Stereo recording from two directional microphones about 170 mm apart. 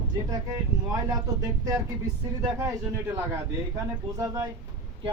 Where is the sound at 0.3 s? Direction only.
20° right (ahead or behind).